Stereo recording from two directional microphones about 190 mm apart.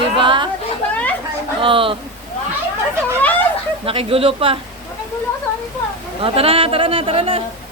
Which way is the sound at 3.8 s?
30° right (ahead or behind).